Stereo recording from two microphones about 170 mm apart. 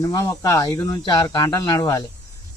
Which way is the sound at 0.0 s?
20° left (ahead or behind).